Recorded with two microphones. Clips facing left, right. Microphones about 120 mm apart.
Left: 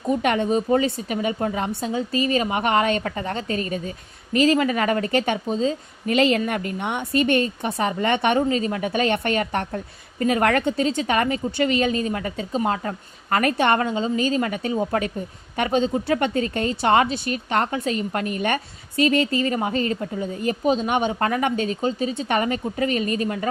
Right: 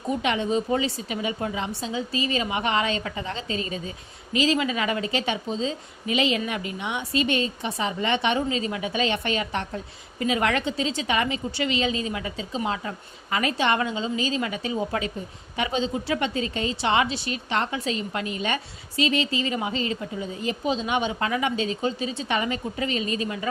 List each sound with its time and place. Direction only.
0.2 s a woman's voice: 50° left (ahead or behind)